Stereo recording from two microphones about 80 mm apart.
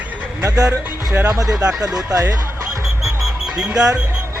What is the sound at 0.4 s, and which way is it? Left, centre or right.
Speech, right.